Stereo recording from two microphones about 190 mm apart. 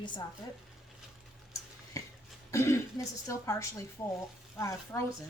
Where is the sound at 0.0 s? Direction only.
25° left (ahead or behind).